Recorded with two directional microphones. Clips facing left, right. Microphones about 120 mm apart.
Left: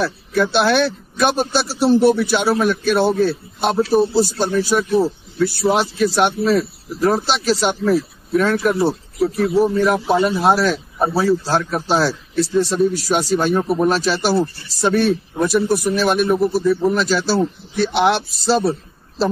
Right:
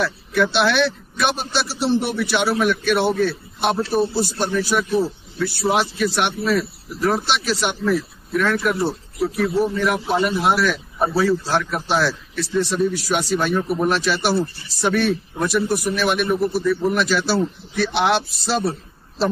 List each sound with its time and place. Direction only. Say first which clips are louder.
0.0 s a man's voice: left 1 dB; 40° left (ahead or behind)